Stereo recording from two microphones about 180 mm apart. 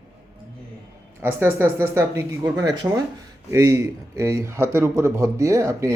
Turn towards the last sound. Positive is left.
turn(degrees=-15)  # may be behind; listen again after turning